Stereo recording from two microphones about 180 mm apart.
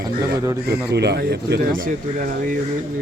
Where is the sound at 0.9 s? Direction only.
65° right (ahead or behind); by 2.6 s 50° right (ahead or behind).